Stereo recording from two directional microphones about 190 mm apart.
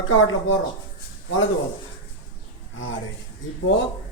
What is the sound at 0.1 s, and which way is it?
Speech, 90° left.